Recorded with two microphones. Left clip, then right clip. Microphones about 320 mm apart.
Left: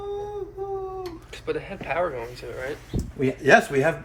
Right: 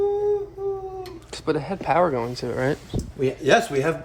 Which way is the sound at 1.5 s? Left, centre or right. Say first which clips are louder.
Right 6 dB; centre.